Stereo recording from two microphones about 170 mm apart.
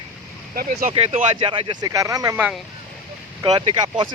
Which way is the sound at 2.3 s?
5° right (ahead or behind).